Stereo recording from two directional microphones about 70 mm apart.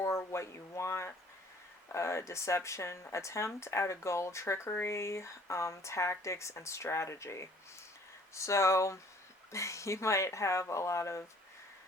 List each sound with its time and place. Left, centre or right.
0.3 s speech: left